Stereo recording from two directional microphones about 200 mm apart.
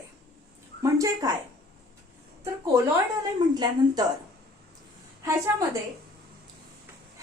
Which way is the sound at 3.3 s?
20° right (ahead or behind).